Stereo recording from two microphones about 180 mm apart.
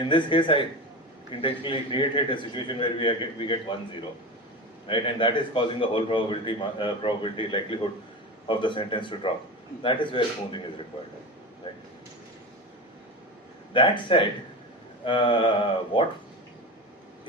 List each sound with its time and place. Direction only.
0.0 s a man's voice: 25° left (ahead or behind)
4.9 s a man's voice: 30° left (ahead or behind)
13.7 s a man's voice: 25° left (ahead or behind)